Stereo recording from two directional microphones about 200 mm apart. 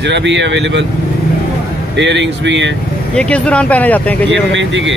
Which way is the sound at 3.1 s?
5° left (ahead or behind).